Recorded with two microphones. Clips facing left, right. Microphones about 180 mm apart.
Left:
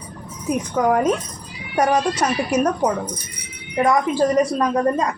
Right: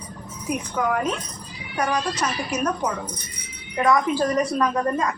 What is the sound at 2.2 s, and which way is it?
A woman's voice, 40° left (ahead or behind).